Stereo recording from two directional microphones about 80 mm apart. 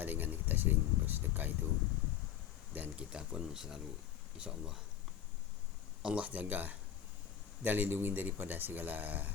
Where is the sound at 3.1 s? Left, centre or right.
Centre.